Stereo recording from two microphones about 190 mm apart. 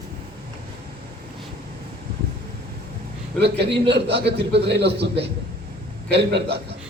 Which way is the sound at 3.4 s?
60° right (ahead or behind).